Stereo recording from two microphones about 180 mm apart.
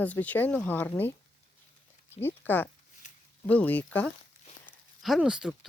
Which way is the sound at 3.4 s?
10° left (ahead or behind).